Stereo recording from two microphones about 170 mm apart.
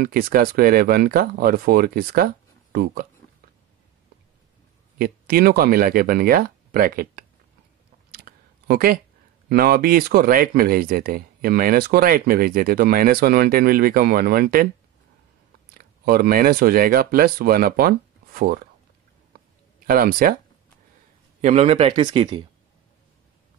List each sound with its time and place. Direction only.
0.0 s speech: 60° right (ahead or behind)
4.9 s speech: 60° right (ahead or behind)
8.1 s a sound: 65° right (ahead or behind)
9.5 s speech: 60° right (ahead or behind)
15.7 s speech: 60° right (ahead or behind)
19.9 s speech: 60° right (ahead or behind)
21.4 s speech: 40° right (ahead or behind)